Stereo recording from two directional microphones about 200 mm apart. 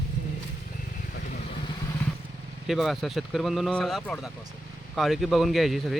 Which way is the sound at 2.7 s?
Centre (ahead or behind).